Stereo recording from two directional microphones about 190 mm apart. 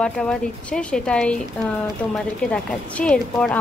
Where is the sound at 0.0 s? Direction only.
5° left (ahead or behind).